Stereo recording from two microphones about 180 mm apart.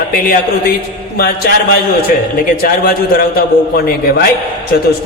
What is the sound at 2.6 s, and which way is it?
Speech, 55° left (ahead or behind).